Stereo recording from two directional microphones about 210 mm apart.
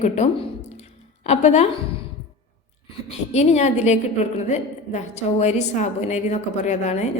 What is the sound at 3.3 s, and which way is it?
A woman's voice, 30° left (ahead or behind).